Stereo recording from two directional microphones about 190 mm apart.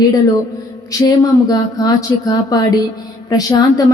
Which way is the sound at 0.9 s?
20° left (ahead or behind).